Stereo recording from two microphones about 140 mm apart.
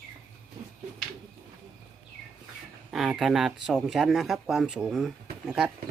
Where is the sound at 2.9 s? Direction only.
5° right (ahead or behind).